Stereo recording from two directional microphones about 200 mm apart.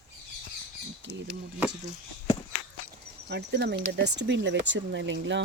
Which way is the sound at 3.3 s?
55° right (ahead or behind).